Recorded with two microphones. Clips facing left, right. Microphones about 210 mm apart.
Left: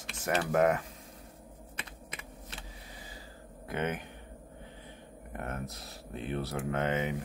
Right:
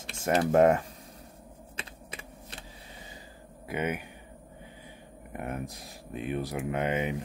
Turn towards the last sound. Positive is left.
turn(degrees=-15)  # may be behind; listen again after turning